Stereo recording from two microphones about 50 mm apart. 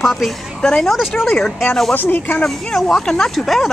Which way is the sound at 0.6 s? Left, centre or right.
Centre.